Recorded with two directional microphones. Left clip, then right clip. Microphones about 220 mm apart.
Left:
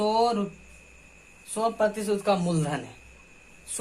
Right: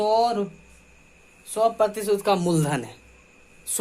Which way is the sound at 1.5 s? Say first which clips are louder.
Right 4 dB; 45° right (ahead or behind).